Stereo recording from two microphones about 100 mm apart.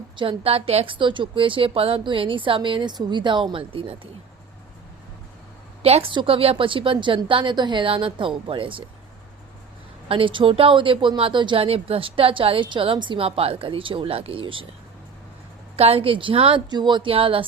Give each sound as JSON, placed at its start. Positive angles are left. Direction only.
{"t": 0.2, "sound": "speech", "side_deg": -70}
{"t": 5.8, "sound": "speech", "side_deg": -75}
{"t": 10.1, "sound": "speech", "side_deg": -60}
{"t": 15.7, "sound": "speech", "side_deg": -80}